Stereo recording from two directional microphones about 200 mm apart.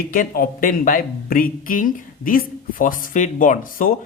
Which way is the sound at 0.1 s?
45° left (ahead or behind).